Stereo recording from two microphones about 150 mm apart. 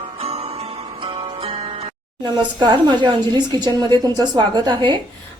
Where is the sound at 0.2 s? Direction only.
45° right (ahead or behind).